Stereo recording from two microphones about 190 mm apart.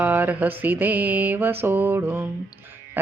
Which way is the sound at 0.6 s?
10° right (ahead or behind).